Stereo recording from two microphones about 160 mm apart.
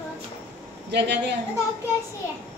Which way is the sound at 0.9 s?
90° right.